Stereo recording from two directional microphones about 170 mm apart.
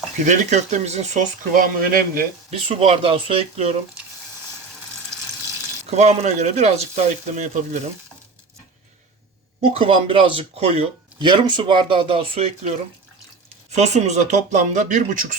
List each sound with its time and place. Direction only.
0.3 s speech: 45° right (ahead or behind)
2.5 s speech: 35° right (ahead or behind)
5.8 s speech: 40° right (ahead or behind)
9.6 s speech: 35° right (ahead or behind)
11.2 s speech: 25° right (ahead or behind)
13.7 s speech: 40° right (ahead or behind)